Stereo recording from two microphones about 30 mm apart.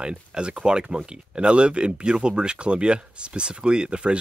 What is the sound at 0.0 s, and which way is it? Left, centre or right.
Speech, right.